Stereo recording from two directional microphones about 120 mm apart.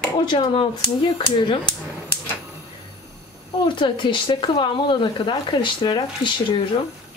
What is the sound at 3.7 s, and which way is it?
Speech, 40° left (ahead or behind).